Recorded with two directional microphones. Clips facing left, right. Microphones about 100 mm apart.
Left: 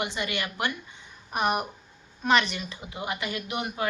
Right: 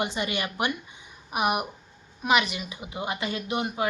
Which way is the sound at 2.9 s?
20° right (ahead or behind).